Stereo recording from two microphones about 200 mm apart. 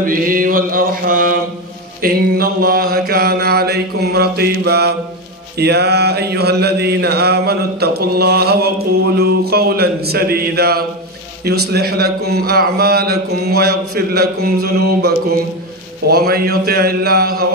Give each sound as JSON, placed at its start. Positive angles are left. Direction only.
{"t": 0.0, "sound": "mantra", "side_deg": -45}